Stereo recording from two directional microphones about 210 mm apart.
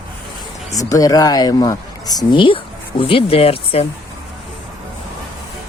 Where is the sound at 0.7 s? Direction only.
15° left (ahead or behind).